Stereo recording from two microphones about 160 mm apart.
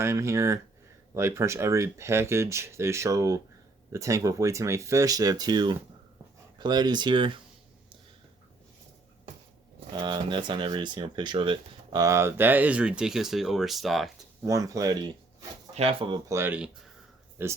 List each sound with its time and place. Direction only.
0.0 s speech: 15° right (ahead or behind)
9.9 s speech: 30° right (ahead or behind); by 14.1 s centre (ahead or behind)
14.4 s speech: 20° right (ahead or behind)
15.7 s speech: 40° right (ahead or behind)
16.3 s speech: 10° right (ahead or behind)